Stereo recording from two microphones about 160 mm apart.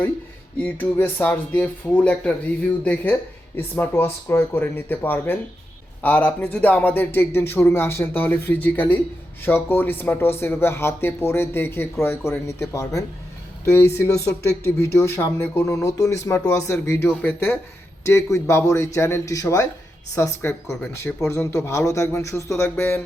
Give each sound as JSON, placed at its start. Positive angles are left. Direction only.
{"t": 0.6, "sound": "speech", "side_deg": 10}